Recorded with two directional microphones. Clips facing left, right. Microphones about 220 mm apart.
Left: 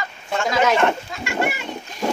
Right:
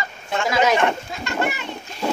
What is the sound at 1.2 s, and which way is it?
Speech, 10° left (ahead or behind).